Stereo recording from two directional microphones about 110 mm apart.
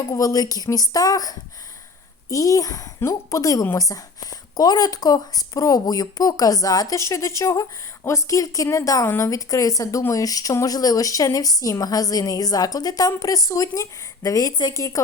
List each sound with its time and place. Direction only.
0.1 s speech: 30° left (ahead or behind)